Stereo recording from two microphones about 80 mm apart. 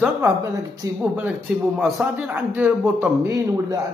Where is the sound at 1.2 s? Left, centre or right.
Centre.